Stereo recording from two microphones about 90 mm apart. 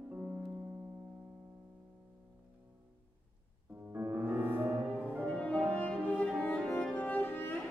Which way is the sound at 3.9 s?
25° right (ahead or behind).